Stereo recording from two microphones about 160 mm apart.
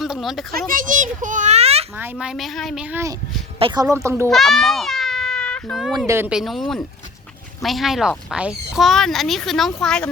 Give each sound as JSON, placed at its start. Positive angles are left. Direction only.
{"t": 0.0, "sound": "a child's voice", "side_deg": 0}
{"t": 0.7, "sound": "a child's voice", "side_deg": -55}
{"t": 2.0, "sound": "speech", "side_deg": -10}
{"t": 3.6, "sound": "speech", "side_deg": -25}
{"t": 4.3, "sound": "a sound", "side_deg": 0}
{"t": 6.1, "sound": "speech", "side_deg": -15}
{"t": 6.3, "sound": "speech", "side_deg": 0}